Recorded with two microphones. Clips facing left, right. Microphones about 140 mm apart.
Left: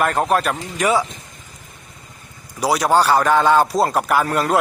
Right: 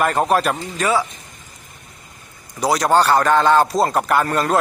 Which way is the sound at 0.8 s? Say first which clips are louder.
Left 2 dB; 20° left (ahead or behind).